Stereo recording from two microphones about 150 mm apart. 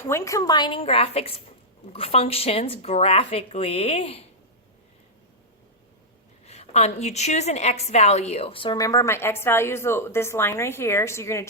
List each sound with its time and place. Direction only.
0.0 s speech: 20° left (ahead or behind); by 4.3 s 40° left (ahead or behind)
6.4 s a woman's voice: 45° left (ahead or behind); by 11.4 s 20° left (ahead or behind)